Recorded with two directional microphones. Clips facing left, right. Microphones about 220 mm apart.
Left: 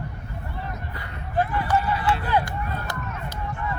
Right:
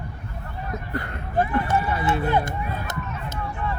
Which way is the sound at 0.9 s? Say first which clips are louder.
Right 5 dB; 50° right (ahead or behind).